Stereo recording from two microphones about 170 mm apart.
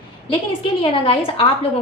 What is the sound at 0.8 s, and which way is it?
Speech, 30° left (ahead or behind).